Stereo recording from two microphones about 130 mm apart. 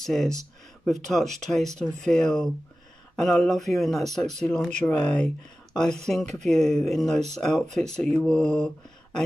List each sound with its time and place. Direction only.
0.0 s speech: centre (ahead or behind)
1.2 s speech: 65° right (ahead or behind)
1.5 s speech: 5° left (ahead or behind)